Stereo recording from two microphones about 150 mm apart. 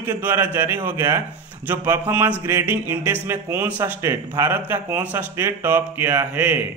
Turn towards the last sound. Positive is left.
turn(degrees=-10)  # may be behind; listen again after turning